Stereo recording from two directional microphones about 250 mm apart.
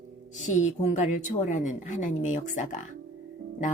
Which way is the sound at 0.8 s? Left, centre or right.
Left.